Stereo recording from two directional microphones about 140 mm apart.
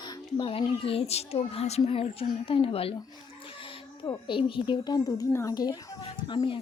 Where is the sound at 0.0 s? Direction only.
30° left (ahead or behind).